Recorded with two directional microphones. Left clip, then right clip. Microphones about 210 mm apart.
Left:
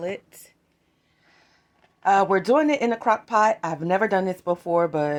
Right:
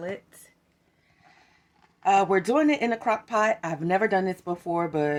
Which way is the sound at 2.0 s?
10° left (ahead or behind).